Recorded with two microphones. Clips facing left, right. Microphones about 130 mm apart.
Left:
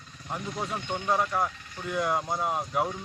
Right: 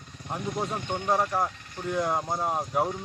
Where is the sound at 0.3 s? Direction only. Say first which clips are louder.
Right 2 dB; 15° right (ahead or behind).